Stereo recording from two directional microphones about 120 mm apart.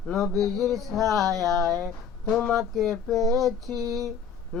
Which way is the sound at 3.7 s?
30° right (ahead or behind).